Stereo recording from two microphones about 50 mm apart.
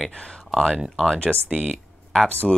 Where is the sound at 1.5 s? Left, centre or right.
Centre.